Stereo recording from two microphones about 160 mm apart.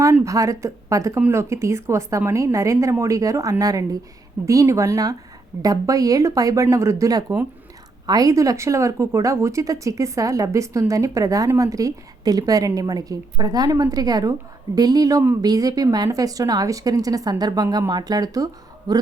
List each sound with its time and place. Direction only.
0.0 s speech: 20° right (ahead or behind)